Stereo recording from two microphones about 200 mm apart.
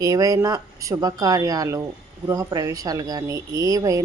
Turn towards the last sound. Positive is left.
turn(degrees=-15)  # may be behind; listen again after turning